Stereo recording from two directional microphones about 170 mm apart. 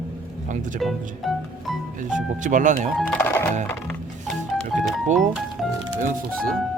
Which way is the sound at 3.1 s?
15° left (ahead or behind).